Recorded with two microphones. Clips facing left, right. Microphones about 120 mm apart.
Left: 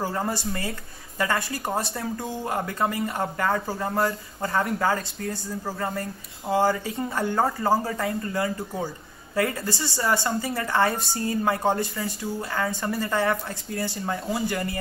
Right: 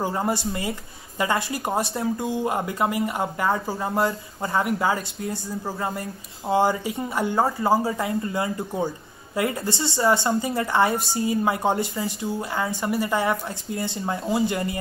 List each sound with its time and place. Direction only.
0.0 s a woman's voice: 20° right (ahead or behind)